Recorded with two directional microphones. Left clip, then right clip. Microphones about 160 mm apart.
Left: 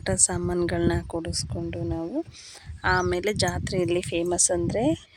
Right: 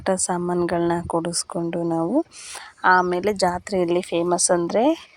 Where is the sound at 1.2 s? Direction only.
20° right (ahead or behind).